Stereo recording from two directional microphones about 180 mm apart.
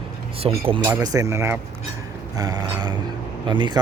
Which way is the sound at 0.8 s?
15° right (ahead or behind).